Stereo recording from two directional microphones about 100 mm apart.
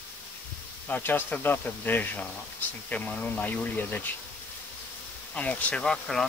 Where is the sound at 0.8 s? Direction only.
20° left (ahead or behind).